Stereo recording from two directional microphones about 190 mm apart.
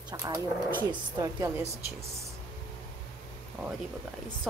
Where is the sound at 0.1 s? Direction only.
20° right (ahead or behind).